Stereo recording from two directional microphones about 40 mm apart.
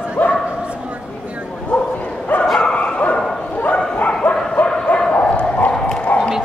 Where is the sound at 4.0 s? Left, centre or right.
Left.